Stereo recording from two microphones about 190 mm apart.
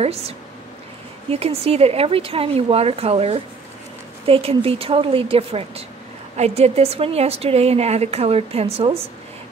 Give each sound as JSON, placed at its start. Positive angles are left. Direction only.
{"t": 1.3, "sound": "a woman's voice", "side_deg": -30}